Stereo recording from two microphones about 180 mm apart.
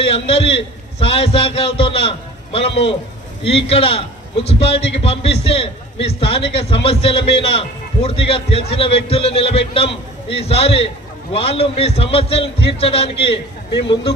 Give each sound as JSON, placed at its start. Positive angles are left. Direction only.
{"t": 0.0, "sound": "a man's voice", "side_deg": 30}